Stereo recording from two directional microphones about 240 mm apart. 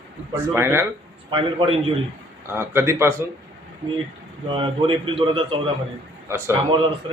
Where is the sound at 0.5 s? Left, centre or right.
Centre.